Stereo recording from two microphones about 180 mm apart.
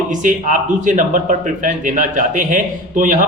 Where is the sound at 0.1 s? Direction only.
45° right (ahead or behind).